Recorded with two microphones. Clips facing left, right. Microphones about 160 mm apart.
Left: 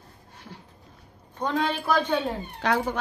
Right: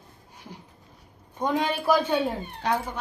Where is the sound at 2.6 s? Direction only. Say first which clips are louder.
Left 3 dB; 90° left.